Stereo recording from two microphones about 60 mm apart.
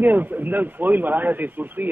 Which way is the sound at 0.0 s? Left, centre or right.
Right.